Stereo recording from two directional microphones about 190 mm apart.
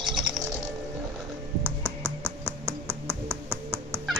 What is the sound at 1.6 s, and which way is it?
Finger snapping, 15° right (ahead or behind).